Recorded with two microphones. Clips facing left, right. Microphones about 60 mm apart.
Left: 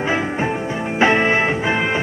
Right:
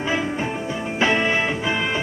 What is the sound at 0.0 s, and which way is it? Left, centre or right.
Music, left.